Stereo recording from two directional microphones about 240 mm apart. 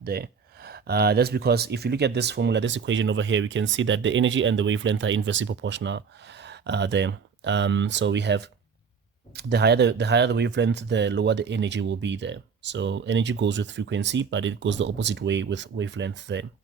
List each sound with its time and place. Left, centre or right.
0.0 s speech: right